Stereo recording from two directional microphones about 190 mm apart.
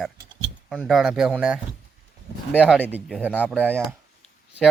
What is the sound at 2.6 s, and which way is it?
Speech, 10° right (ahead or behind).